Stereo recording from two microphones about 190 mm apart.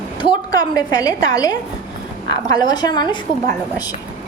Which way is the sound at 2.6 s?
20° left (ahead or behind).